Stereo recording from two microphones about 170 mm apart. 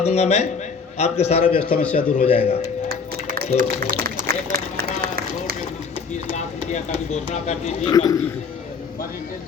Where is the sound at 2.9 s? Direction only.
60° right (ahead or behind).